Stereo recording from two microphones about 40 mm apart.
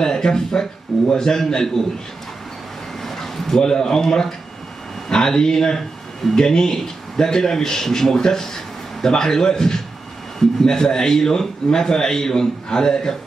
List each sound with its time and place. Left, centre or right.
0.0 s a man's voice: centre
3.0 s a man's voice: centre